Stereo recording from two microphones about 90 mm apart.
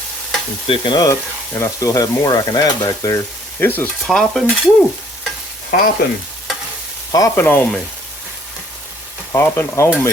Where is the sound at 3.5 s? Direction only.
20° left (ahead or behind).